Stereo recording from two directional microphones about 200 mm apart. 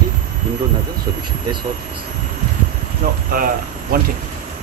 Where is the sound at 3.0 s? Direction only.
40° right (ahead or behind).